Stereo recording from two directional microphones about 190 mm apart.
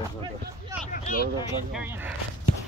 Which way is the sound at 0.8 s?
45° left (ahead or behind).